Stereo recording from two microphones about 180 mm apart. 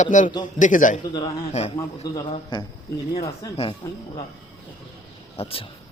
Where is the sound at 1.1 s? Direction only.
35° left (ahead or behind).